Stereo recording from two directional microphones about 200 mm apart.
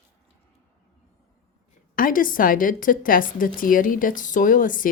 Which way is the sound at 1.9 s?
45° left (ahead or behind).